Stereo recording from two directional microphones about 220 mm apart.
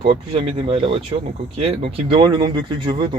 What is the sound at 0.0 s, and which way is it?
Speech, 25° right (ahead or behind).